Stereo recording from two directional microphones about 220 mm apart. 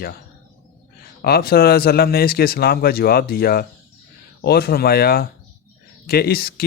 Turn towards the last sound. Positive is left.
turn(degrees=45)  # may be behind; listen again after turning